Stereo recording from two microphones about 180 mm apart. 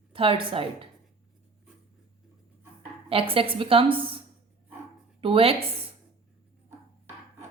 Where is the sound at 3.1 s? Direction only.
30° right (ahead or behind).